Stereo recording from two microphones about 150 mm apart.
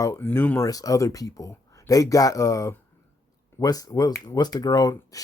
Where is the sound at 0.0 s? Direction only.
15° left (ahead or behind).